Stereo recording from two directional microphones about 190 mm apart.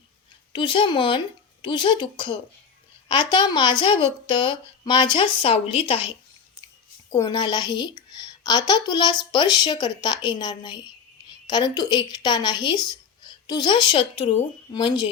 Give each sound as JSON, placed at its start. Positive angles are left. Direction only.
{"t": 0.5, "sound": "speech", "side_deg": 25}
{"t": 7.1, "sound": "speech", "side_deg": 20}